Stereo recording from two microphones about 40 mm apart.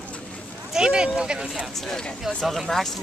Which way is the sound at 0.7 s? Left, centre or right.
Centre.